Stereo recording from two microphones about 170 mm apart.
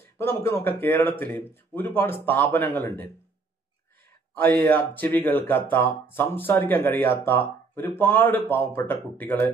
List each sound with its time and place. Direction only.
0.0 s speech: 15° left (ahead or behind)
4.4 s speech: 10° left (ahead or behind)